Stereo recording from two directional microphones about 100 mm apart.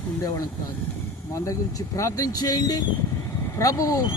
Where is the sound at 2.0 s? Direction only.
35° left (ahead or behind).